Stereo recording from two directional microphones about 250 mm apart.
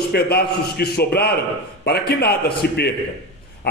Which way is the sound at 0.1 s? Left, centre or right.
Left.